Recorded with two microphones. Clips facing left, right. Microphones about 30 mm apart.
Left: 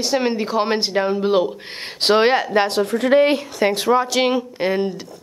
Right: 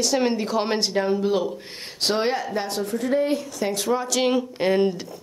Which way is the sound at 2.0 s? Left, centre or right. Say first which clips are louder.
Left 8 dB; left.